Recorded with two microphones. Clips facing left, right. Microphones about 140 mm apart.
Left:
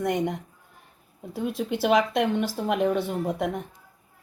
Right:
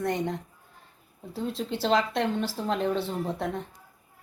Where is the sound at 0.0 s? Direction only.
15° left (ahead or behind).